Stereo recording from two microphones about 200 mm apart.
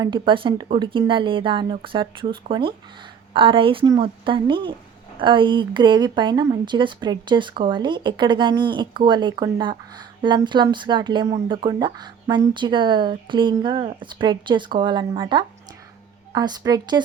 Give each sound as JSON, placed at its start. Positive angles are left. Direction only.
{"t": 0.0, "sound": "speech", "side_deg": -25}